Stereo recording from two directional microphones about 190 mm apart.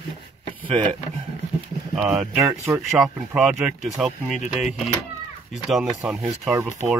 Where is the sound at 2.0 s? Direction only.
5° right (ahead or behind).